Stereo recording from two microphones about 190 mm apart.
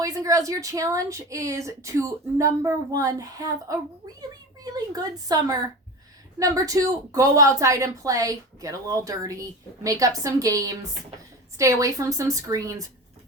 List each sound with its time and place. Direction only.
0.0 s a woman's voice: 15° right (ahead or behind)